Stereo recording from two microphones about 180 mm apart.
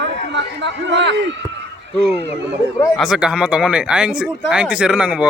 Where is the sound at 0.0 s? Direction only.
80° right.